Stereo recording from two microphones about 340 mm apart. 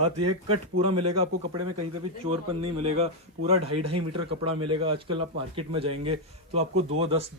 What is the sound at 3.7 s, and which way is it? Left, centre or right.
Speech, right.